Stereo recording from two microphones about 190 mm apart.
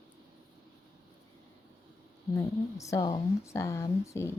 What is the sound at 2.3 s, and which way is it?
Speech, 15° left (ahead or behind).